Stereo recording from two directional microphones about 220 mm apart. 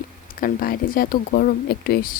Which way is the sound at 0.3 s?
40° left (ahead or behind).